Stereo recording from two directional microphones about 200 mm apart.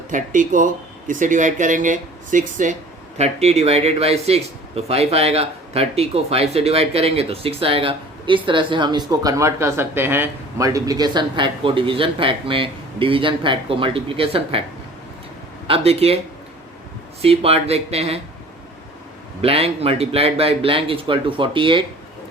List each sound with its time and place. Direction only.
0.1 s a man's voice: 40° right (ahead or behind)
15.6 s speech: 30° right (ahead or behind)
19.4 s a man's voice: 30° right (ahead or behind)